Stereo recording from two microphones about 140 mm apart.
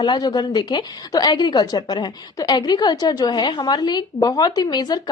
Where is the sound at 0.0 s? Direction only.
30° left (ahead or behind).